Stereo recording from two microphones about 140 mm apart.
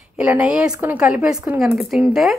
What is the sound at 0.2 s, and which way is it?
A woman's voice, 10° right (ahead or behind).